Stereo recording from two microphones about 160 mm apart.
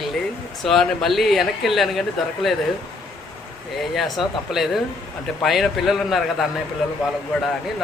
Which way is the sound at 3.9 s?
Centre (ahead or behind).